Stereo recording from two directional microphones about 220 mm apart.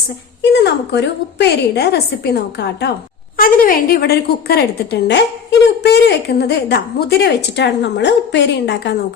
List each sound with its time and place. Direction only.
0.5 s a woman's voice: 50° left (ahead or behind)